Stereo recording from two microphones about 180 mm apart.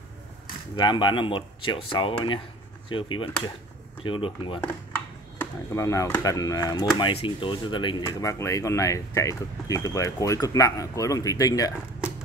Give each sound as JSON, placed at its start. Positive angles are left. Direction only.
{"t": 0.7, "sound": "speech", "side_deg": 25}
{"t": 5.4, "sound": "speech", "side_deg": 15}